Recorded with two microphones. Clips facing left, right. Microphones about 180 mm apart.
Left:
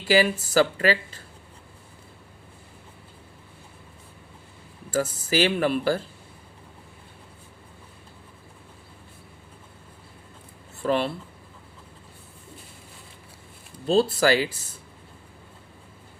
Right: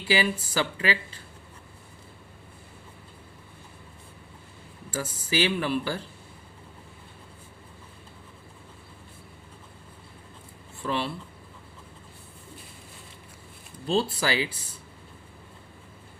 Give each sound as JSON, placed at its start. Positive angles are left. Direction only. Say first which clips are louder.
{"t": 0.0, "sound": "speech", "louder": "left 5 dB", "side_deg": 45}
{"t": 4.9, "sound": "speech", "louder": "left 5 dB", "side_deg": 45}
{"t": 10.8, "sound": "speech", "louder": "left 6 dB", "side_deg": 45}
{"t": 13.9, "sound": "speech", "louder": "left 6 dB", "side_deg": 45}